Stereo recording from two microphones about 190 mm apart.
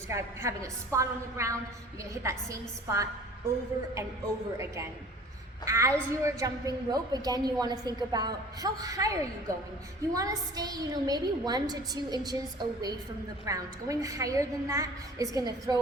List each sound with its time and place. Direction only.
0.1 s a woman's voice: 15° right (ahead or behind)
4.5 s a woman's voice: 15° right (ahead or behind)
10.2 s a woman's voice: 20° right (ahead or behind)